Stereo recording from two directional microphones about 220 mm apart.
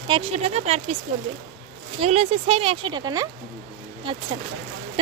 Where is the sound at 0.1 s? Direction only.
30° right (ahead or behind).